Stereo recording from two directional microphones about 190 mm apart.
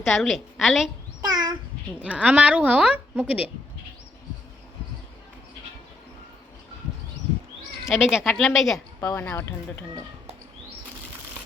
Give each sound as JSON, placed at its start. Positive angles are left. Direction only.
{"t": 0.1, "sound": "a woman's voice", "side_deg": 0}
{"t": 1.2, "sound": "babbling", "side_deg": -20}
{"t": 2.0, "sound": "a woman's voice", "side_deg": -5}
{"t": 7.9, "sound": "a woman's voice", "side_deg": -5}
{"t": 9.0, "sound": "speech", "side_deg": 15}